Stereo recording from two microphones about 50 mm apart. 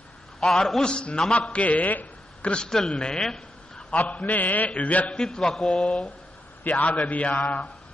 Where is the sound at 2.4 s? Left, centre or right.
Centre.